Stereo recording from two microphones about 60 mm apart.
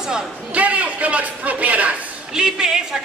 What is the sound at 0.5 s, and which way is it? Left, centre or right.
Speech, right.